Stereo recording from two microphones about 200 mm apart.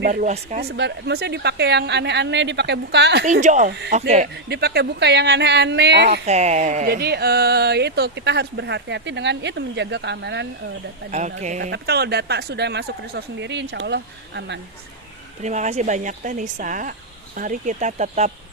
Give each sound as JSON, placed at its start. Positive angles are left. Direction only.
{"t": 0.0, "sound": "speech", "side_deg": -40}
{"t": 0.6, "sound": "speech", "side_deg": -55}
{"t": 3.4, "sound": "speech", "side_deg": -40}
{"t": 3.7, "sound": "speech", "side_deg": -55}
{"t": 6.2, "sound": "speech", "side_deg": -35}
{"t": 6.8, "sound": "speech", "side_deg": -50}
{"t": 11.1, "sound": "speech", "side_deg": -35}
{"t": 11.7, "sound": "speech", "side_deg": -55}
{"t": 15.4, "sound": "speech", "side_deg": -35}